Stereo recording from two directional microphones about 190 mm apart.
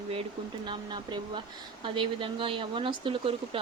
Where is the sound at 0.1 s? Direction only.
25° right (ahead or behind).